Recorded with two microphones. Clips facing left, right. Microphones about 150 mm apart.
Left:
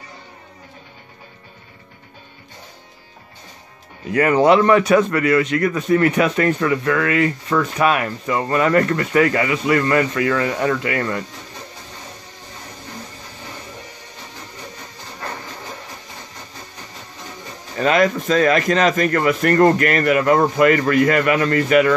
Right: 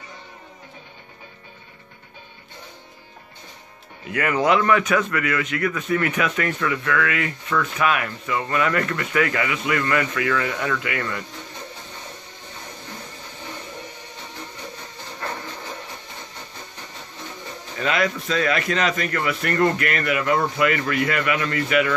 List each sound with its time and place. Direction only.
4.1 s a man's voice: 35° left (ahead or behind)
17.7 s a man's voice: 40° left (ahead or behind)